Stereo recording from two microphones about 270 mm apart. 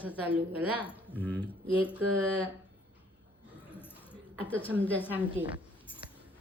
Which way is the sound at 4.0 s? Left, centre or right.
Centre.